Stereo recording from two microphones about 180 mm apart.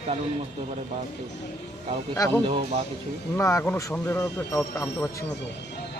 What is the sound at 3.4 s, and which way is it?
Speech, 15° left (ahead or behind).